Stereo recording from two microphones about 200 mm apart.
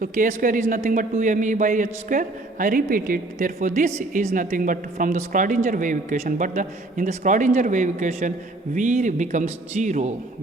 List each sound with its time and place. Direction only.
0.0 s speech: 40° right (ahead or behind)